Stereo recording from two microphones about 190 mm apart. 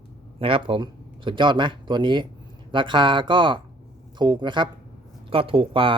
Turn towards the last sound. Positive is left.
turn(degrees=-25)  # may be behind; listen again after turning